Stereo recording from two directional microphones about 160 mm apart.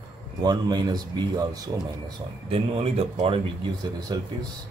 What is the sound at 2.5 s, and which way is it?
Speech, 40° right (ahead or behind).